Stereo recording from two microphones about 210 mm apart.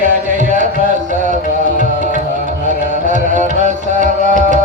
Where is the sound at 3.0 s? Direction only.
35° right (ahead or behind).